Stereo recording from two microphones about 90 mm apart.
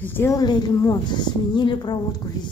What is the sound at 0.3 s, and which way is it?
Speech, 45° left (ahead or behind).